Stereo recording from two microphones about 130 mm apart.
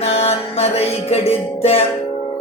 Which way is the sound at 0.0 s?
50° left (ahead or behind).